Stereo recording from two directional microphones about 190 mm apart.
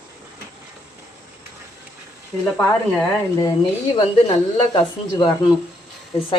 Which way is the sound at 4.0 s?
20° left (ahead or behind).